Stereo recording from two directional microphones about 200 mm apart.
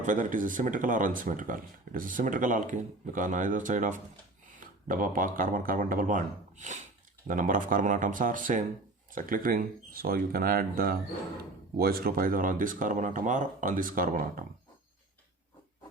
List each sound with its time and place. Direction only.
0.0 s speech: 40° right (ahead or behind)